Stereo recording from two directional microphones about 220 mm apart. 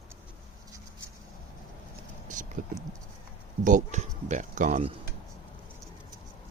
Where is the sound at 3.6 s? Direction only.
35° right (ahead or behind).